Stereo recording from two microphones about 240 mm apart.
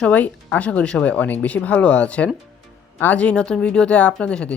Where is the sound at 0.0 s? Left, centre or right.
Centre.